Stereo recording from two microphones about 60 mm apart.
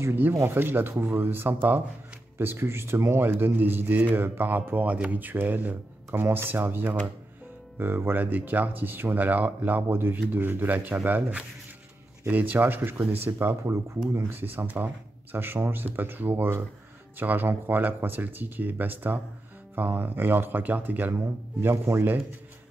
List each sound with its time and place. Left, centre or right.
0.1 s speech: right
6.1 s speech: right
21.1 s speech: right